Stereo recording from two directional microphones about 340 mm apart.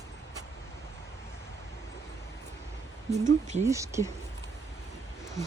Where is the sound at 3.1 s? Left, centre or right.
Centre.